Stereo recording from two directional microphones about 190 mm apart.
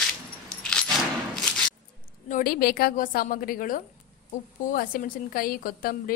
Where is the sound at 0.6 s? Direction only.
5° left (ahead or behind).